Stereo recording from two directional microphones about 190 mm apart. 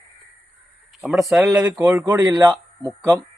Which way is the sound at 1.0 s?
Centre (ahead or behind).